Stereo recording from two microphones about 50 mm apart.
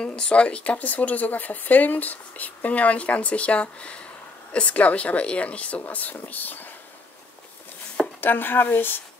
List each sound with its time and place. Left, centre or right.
0.0 s speech: left
8.2 s speech: left